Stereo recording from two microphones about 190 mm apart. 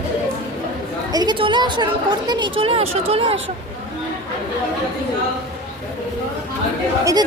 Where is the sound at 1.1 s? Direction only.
20° right (ahead or behind).